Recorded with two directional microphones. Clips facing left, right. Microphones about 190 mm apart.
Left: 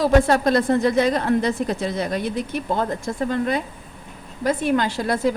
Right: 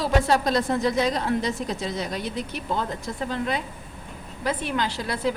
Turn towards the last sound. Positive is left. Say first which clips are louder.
# left 5 dB
turn(degrees=45)  # may be behind; listen again after turning